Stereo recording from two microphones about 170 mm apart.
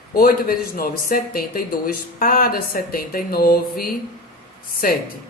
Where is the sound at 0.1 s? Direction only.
60° left (ahead or behind).